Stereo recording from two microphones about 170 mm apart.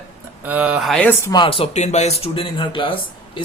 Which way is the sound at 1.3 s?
30° left (ahead or behind).